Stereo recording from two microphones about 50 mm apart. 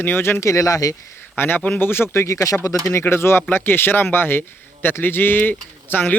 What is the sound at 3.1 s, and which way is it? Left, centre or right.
A man's voice, left.